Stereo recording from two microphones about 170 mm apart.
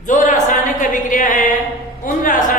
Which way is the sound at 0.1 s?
50° left (ahead or behind).